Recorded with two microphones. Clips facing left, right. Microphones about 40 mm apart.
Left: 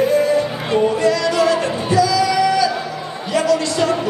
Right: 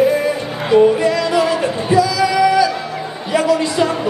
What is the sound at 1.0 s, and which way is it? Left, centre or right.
Music, centre.